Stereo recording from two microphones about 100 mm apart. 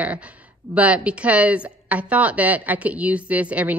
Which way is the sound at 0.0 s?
15° right (ahead or behind).